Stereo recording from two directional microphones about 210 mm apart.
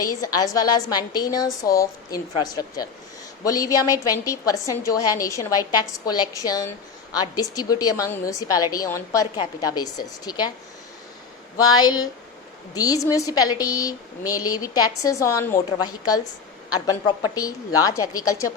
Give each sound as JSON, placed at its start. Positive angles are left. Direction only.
{"t": 0.0, "sound": "a woman's voice", "side_deg": 15}
{"t": 11.8, "sound": "a woman's voice", "side_deg": 20}